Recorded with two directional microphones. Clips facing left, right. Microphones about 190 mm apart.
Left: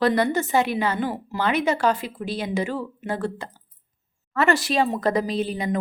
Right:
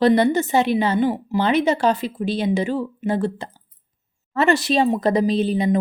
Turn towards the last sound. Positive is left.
turn(degrees=-25)  # may be behind; listen again after turning